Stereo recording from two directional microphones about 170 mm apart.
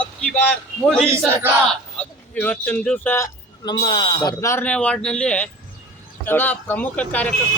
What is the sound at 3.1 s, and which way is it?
Speech, 20° left (ahead or behind).